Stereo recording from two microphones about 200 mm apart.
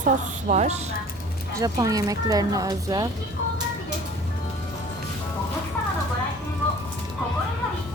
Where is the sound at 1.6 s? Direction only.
15° right (ahead or behind).